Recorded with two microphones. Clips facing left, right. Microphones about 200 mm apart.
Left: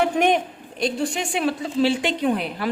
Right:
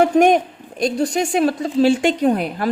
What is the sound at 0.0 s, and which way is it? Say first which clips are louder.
A woman's voice: right 6 dB; 45° right (ahead or behind).